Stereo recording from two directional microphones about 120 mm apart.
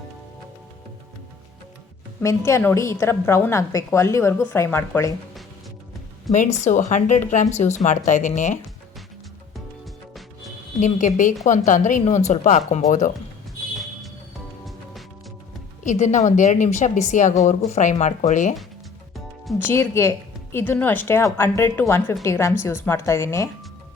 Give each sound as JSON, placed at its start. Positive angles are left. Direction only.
{"t": 2.2, "sound": "a woman's voice", "side_deg": 25}
{"t": 6.3, "sound": "speech", "side_deg": 85}
{"t": 10.8, "sound": "speech", "side_deg": 90}
{"t": 15.8, "sound": "speech", "side_deg": 80}
{"t": 19.5, "sound": "a woman's voice", "side_deg": 20}